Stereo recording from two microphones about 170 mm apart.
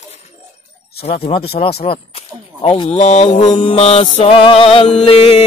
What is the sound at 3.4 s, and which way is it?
Music, 30° left (ahead or behind).